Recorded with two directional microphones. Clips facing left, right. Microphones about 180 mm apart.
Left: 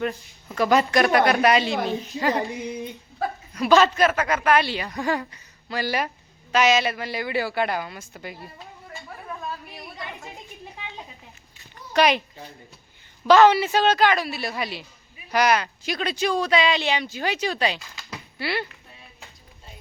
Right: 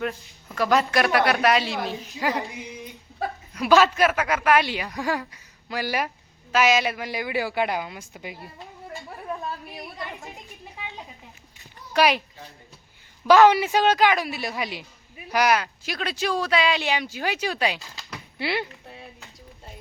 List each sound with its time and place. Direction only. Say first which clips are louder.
0.0 s speech: left 2 dB; centre (ahead or behind)
3.5 s a woman's voice: even; 10° right (ahead or behind)
4.9 s a woman's voice: left 2 dB; centre (ahead or behind)
11.9 s speech: left 1 dB; 5° right (ahead or behind)
13.2 s a woman's voice: even; 15° right (ahead or behind)
18.3 s speech: right 1 dB; 20° right (ahead or behind)